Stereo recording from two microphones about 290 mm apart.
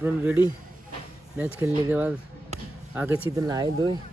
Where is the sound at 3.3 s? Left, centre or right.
Centre.